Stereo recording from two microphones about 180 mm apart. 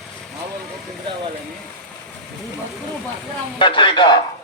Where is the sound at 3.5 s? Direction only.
25° left (ahead or behind).